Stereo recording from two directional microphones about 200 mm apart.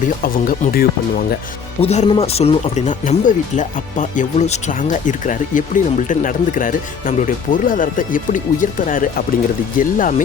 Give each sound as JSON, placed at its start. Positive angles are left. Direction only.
{"t": 0.2, "sound": "speech", "side_deg": 45}
{"t": 1.8, "sound": "speech", "side_deg": 30}